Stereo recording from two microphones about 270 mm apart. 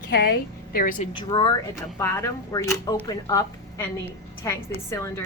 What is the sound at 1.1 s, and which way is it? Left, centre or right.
A woman's voice, centre.